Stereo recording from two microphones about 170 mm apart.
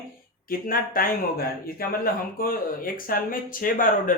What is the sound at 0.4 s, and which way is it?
Speech, 60° left (ahead or behind).